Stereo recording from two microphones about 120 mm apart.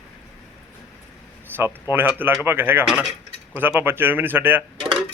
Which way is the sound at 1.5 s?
20° right (ahead or behind).